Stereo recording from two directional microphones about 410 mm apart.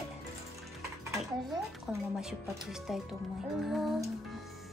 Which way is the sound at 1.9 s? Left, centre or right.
Centre.